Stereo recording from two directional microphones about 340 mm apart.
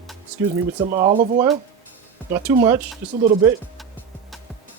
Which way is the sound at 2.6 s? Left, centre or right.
Centre.